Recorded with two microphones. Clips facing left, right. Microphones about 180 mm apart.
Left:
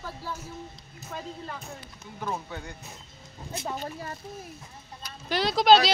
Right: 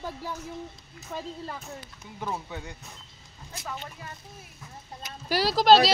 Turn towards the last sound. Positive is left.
turn(degrees=0)  # may be behind; listen again after turning